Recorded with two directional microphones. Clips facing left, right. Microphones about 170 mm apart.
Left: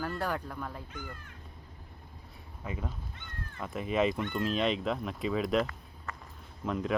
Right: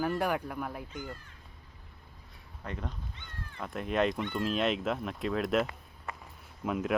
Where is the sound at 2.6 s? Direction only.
5° left (ahead or behind).